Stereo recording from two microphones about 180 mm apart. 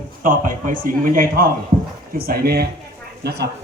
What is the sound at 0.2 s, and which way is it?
Speech, 50° right (ahead or behind).